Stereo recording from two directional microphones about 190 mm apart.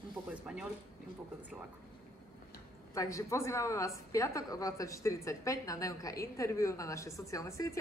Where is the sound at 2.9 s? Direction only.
15° left (ahead or behind).